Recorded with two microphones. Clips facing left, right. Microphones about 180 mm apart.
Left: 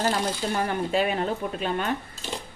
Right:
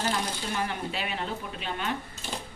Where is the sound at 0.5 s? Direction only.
45° left (ahead or behind).